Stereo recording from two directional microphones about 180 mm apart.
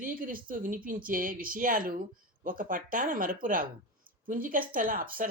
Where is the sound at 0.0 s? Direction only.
50° right (ahead or behind).